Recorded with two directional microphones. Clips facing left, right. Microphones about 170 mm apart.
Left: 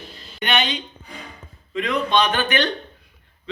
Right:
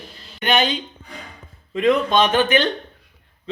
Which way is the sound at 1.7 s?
35° right (ahead or behind).